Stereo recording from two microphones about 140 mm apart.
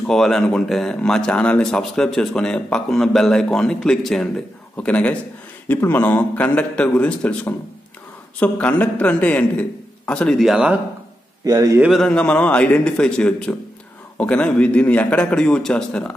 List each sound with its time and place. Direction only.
0.0 s a man's voice: 5° left (ahead or behind)
11.4 s a man's voice: 25° right (ahead or behind)
11.8 s a man's voice: centre (ahead or behind)